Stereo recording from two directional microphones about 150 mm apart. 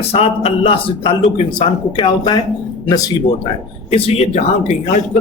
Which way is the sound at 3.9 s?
45° left (ahead or behind).